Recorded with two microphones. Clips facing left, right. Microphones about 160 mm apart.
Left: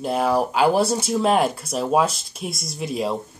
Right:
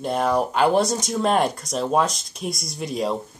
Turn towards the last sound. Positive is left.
turn(degrees=0)  # may be behind; listen again after turning